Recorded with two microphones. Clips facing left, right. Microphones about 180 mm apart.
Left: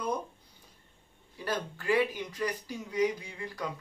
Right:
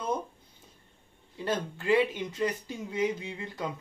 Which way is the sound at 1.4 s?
25° right (ahead or behind).